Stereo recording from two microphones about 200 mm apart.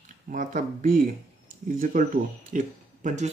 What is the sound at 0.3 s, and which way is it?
Speech, 40° right (ahead or behind).